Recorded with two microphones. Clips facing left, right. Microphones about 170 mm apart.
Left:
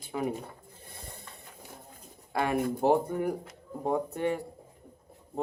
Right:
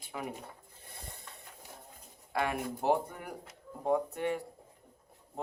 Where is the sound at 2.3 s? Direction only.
35° left (ahead or behind).